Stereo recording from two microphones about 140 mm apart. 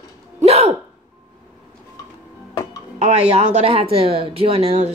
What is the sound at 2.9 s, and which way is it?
Speech, 50° right (ahead or behind).